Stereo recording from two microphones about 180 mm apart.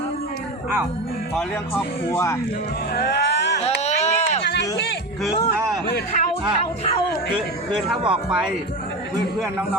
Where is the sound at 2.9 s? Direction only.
65° left (ahead or behind).